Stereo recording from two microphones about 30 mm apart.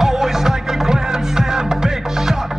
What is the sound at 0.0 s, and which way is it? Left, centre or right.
Music, centre.